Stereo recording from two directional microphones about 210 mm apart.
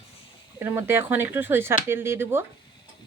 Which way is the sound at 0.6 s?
10° right (ahead or behind).